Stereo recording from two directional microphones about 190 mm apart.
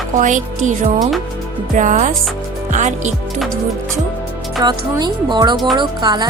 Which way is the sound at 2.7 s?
40° right (ahead or behind).